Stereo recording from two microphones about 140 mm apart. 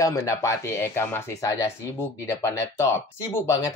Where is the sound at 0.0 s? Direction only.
25° left (ahead or behind).